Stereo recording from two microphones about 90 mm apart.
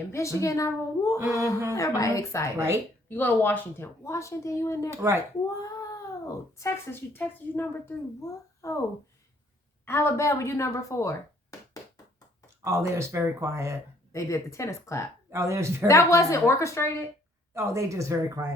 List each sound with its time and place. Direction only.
0.1 s a woman's voice: 35° left (ahead or behind)
2.6 s speech: 30° right (ahead or behind)
3.1 s speech: 20° left (ahead or behind)
3.8 s a woman's voice: 30° left (ahead or behind)
4.9 s speech: 30° right (ahead or behind)
5.5 s a sound: 40° left (ahead or behind)
6.6 s a woman's voice: 30° left (ahead or behind)
8.6 s a woman's voice: 35° left (ahead or behind)
9.8 s a woman's voice: 30° left (ahead or behind)
12.6 s speech: 30° right (ahead or behind)
14.1 s a woman's voice: 35° left (ahead or behind)
15.3 s speech: 30° right (ahead or behind)
15.9 s a woman's voice: 35° left (ahead or behind)
17.5 s speech: 30° right (ahead or behind)